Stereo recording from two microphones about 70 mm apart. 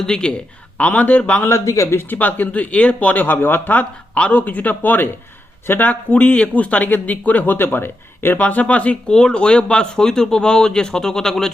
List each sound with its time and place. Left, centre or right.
0.0 s speech: centre
1.5 s speech: left
2.1 s speech: left
8.4 s speech: left